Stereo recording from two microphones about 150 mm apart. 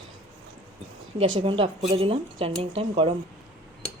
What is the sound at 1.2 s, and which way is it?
Speech, 40° right (ahead or behind).